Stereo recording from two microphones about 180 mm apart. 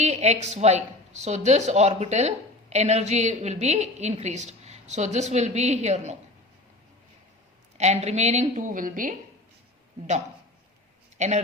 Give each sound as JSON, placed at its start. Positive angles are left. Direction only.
{"t": 0.0, "sound": "speech", "side_deg": -40}
{"t": 7.8, "sound": "speech", "side_deg": -40}
{"t": 11.2, "sound": "speech", "side_deg": -40}